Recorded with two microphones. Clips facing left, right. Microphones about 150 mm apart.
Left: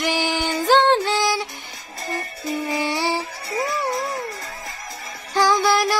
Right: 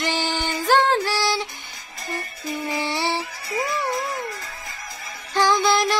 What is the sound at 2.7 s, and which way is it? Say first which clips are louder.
Humming: left 1 dB; 15° left (ahead or behind).